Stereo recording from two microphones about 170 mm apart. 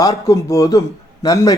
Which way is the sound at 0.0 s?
20° left (ahead or behind).